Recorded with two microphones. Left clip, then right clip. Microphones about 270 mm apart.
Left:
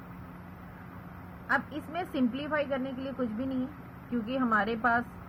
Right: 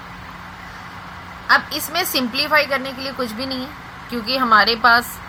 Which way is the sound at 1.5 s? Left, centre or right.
Right.